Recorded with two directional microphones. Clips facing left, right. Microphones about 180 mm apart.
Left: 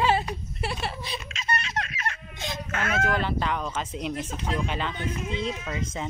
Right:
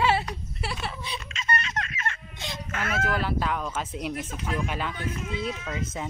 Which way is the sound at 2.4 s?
50° left (ahead or behind).